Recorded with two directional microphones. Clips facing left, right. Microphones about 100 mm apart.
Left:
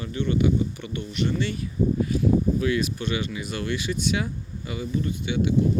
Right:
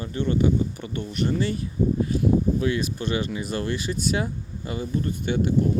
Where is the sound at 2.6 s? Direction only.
30° right (ahead or behind).